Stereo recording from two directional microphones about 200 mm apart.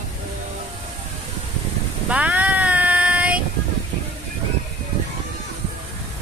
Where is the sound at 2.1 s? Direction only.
10° right (ahead or behind).